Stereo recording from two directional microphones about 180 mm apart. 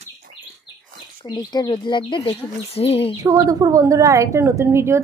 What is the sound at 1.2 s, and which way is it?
Speech, 25° left (ahead or behind).